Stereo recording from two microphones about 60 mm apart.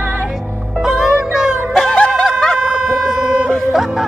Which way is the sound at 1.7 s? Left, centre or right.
Centre.